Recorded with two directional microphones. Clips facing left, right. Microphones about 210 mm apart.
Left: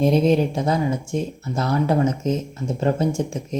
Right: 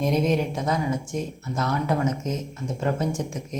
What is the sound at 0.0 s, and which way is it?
Speech, 30° left (ahead or behind).